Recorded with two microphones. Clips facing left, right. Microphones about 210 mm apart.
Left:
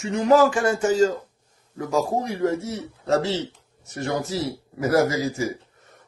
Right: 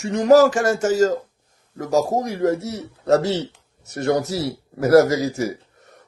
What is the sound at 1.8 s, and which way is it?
Speech, 40° right (ahead or behind).